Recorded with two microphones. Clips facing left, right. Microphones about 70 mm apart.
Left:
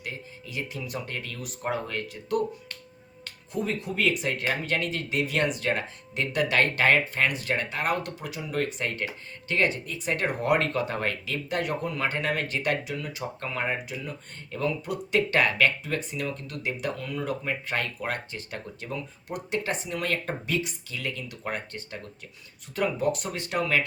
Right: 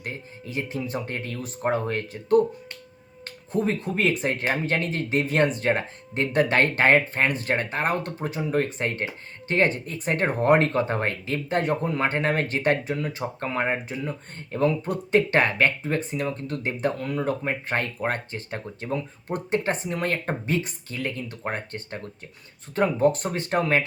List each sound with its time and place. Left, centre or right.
0.0 s speech: right
3.2 s finger snapping: right
3.8 s speech: right